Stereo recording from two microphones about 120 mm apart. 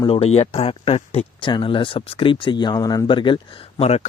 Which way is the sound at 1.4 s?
40° left (ahead or behind).